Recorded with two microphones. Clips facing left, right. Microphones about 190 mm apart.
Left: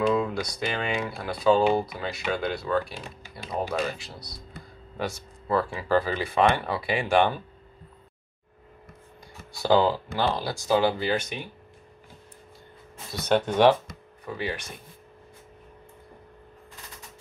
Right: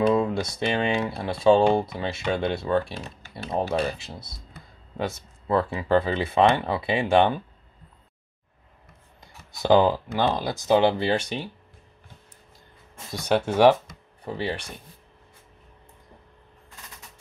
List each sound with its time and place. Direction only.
0.1 s speech: 25° right (ahead or behind)
9.5 s speech: 20° right (ahead or behind)
13.5 s speech: 10° right (ahead or behind)
14.2 s speech: 30° right (ahead or behind)